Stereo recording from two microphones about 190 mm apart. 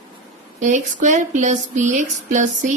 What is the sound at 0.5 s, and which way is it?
Speech, 40° right (ahead or behind).